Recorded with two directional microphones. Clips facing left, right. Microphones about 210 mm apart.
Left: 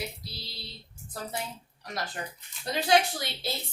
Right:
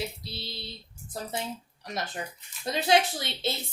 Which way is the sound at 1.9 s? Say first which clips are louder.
Right 1 dB; 20° right (ahead or behind).